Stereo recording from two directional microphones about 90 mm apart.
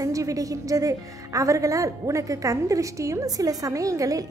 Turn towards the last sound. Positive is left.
turn(degrees=-40)  # may be behind; listen again after turning